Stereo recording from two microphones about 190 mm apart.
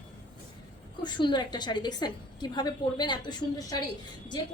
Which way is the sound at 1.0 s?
25° left (ahead or behind).